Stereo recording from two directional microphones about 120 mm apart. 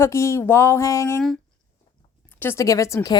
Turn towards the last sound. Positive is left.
turn(degrees=30)  # may be behind; listen again after turning